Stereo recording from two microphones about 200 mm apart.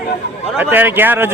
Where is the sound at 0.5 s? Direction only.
10° right (ahead or behind).